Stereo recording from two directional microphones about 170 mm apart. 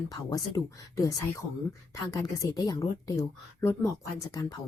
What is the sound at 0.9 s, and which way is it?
Speech, 20° left (ahead or behind).